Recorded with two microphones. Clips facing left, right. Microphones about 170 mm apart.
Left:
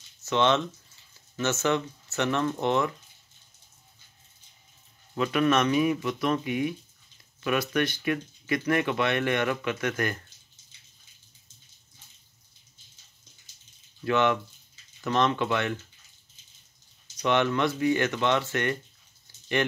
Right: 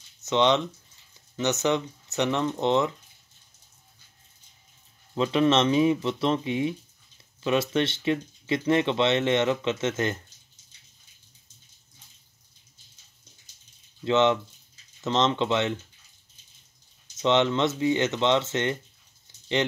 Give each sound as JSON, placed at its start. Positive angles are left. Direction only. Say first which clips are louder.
{"t": 0.2, "sound": "speech", "louder": "right 2 dB", "side_deg": -20}
{"t": 5.1, "sound": "speech", "louder": "right 2 dB", "side_deg": -25}
{"t": 14.0, "sound": "speech", "louder": "right 3 dB", "side_deg": -20}
{"t": 17.2, "sound": "speech", "louder": "right 2 dB", "side_deg": -20}